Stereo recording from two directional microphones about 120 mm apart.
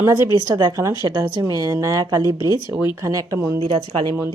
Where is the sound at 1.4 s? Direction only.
30° right (ahead or behind).